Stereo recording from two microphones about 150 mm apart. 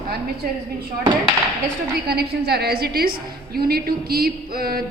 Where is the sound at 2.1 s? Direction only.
90° right.